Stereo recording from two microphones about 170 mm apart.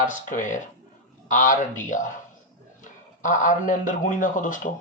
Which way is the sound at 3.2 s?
50° left (ahead or behind).